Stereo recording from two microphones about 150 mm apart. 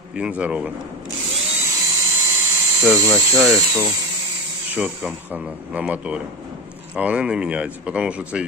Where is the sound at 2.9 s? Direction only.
20° right (ahead or behind).